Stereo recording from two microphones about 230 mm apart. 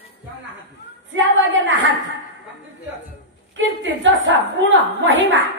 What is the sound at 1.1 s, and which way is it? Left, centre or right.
Speech, right.